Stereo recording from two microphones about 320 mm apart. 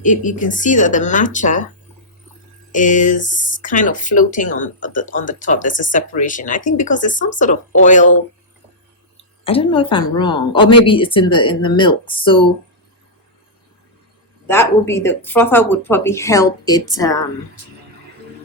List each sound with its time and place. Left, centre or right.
0.0 s speech: left
2.7 s speech: left
9.4 s speech: centre
14.4 s speech: centre